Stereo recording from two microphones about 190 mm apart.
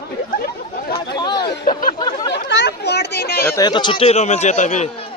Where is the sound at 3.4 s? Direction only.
20° left (ahead or behind); by 5.0 s 35° left (ahead or behind).